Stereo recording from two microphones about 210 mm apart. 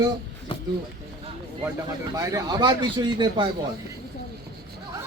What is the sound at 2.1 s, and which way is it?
Speech, 15° right (ahead or behind).